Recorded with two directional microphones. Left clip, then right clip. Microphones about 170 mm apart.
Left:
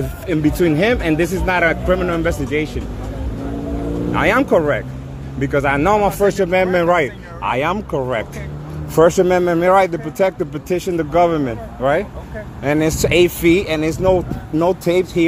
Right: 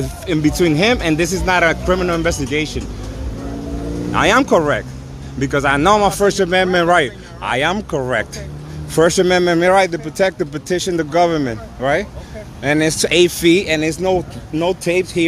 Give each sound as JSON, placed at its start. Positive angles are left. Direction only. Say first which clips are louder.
{"t": 0.3, "sound": "speech", "louder": "right 1 dB", "side_deg": -45}
{"t": 4.1, "sound": "speech", "louder": "right 2 dB", "side_deg": -45}